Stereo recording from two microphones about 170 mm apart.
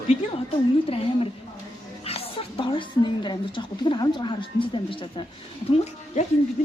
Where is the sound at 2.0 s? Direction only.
35° left (ahead or behind).